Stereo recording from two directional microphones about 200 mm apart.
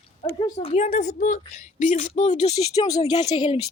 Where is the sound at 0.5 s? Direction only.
35° left (ahead or behind).